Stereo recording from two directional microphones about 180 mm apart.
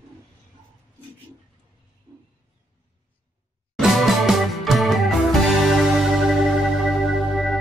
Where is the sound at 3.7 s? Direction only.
Centre (ahead or behind).